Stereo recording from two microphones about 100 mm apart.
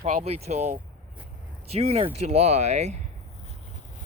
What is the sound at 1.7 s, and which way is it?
Speech, 90° right.